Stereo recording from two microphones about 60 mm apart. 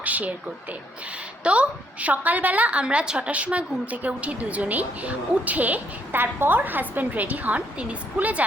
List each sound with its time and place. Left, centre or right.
0.0 s a woman's voice: right